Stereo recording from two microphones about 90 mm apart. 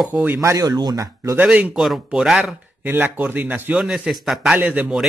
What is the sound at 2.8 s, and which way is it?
Speech, 20° right (ahead or behind).